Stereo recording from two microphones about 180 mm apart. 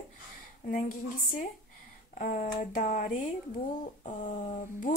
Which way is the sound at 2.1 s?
50° left (ahead or behind).